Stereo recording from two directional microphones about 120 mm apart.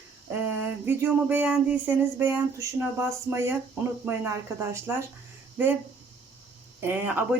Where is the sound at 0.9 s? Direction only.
15° right (ahead or behind).